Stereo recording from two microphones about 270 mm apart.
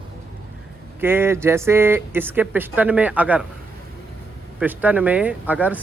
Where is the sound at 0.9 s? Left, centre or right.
Centre.